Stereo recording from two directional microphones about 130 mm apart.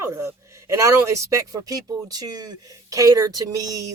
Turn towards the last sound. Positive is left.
turn(degrees=-25)  # may be behind; listen again after turning